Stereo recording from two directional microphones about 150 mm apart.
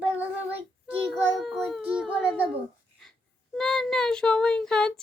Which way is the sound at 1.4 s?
Centre (ahead or behind).